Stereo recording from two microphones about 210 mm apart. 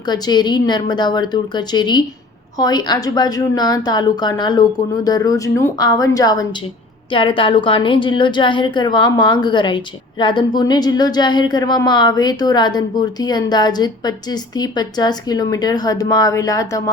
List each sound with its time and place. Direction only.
0.0 s a woman's voice: 20° left (ahead or behind)